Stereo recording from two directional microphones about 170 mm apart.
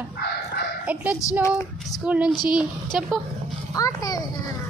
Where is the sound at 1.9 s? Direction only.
5° right (ahead or behind).